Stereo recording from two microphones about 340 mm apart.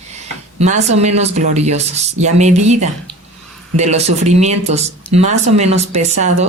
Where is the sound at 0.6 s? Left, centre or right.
Centre.